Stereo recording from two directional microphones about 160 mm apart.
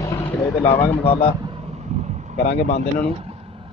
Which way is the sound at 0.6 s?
35° left (ahead or behind).